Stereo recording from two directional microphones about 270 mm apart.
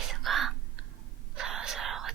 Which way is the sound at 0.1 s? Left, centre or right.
Centre.